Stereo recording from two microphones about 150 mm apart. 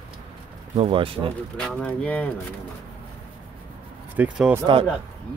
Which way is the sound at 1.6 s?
5° left (ahead or behind).